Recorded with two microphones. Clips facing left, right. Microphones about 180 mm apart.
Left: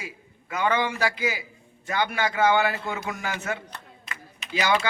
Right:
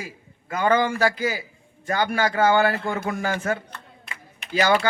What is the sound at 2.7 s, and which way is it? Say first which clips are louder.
Speech: right 5 dB; 55° right (ahead or behind).